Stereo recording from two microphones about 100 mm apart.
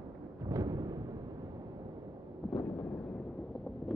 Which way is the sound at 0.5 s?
35° right (ahead or behind).